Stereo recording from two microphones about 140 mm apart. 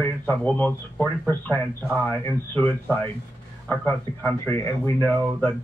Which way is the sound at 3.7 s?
15° left (ahead or behind).